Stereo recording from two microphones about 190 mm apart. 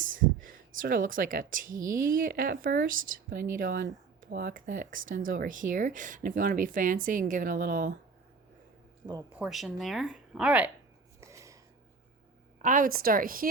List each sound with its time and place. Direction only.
0.0 s speech: 45° right (ahead or behind)
9.3 s speech: 5° right (ahead or behind)
11.2 s a sound: 15° right (ahead or behind)
12.6 s speech: 45° right (ahead or behind)